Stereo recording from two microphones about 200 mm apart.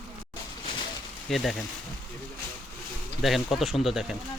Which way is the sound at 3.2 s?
Centre (ahead or behind).